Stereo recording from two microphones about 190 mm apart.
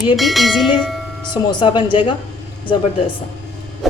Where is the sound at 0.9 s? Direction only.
Centre (ahead or behind).